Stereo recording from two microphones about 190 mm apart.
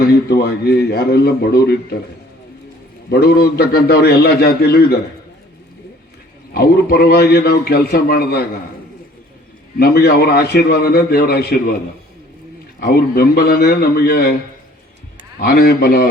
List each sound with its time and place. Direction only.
0.0 s a man's voice: 55° left (ahead or behind)
3.1 s a man's voice: 55° left (ahead or behind)
6.5 s a man's voice: 55° left (ahead or behind)
9.7 s a man's voice: 55° left (ahead or behind)
12.8 s a man's voice: 55° left (ahead or behind)
15.4 s a man's voice: 55° left (ahead or behind)